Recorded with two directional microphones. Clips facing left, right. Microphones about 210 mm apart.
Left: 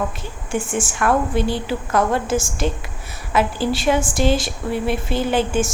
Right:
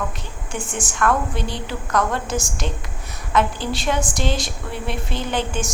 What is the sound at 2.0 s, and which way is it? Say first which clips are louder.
Speech: left 3 dB; 25° left (ahead or behind).